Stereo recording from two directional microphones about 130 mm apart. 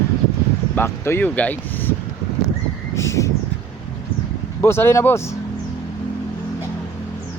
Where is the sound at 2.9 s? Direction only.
20° left (ahead or behind).